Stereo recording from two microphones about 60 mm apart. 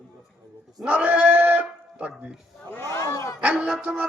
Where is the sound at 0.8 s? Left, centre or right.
Right.